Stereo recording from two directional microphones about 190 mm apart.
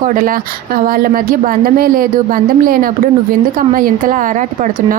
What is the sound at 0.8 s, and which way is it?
A woman's voice, 50° right (ahead or behind).